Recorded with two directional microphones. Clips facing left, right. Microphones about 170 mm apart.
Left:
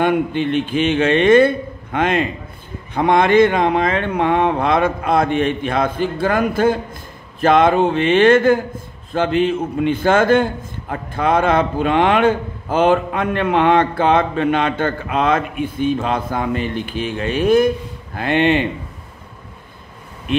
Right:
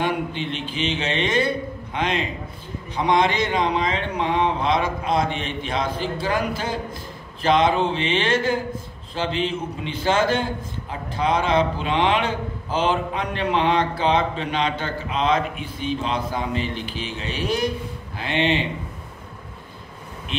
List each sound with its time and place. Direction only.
0.0 s a man's voice: 55° left (ahead or behind)